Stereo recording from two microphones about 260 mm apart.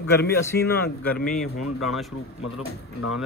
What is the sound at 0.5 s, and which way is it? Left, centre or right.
Speech, left.